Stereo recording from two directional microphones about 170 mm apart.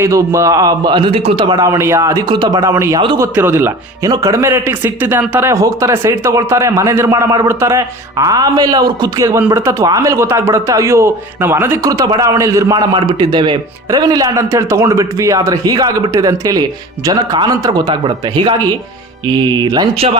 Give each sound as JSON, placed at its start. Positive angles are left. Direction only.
{"t": 0.0, "sound": "a man's voice", "side_deg": -20}